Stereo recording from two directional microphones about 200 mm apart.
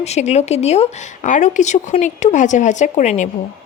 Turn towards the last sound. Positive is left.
turn(degrees=35)  # may be behind; listen again after turning